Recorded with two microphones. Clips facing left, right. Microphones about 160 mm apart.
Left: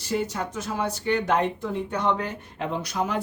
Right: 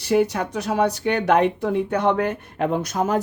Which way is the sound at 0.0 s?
70° right (ahead or behind).